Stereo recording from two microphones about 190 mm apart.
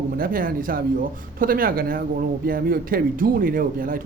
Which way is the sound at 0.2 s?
50° right (ahead or behind).